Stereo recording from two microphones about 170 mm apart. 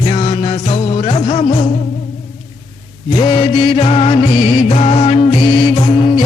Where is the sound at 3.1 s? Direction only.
35° left (ahead or behind).